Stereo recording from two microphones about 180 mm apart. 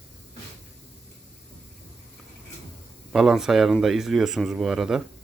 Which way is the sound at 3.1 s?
Centre (ahead or behind).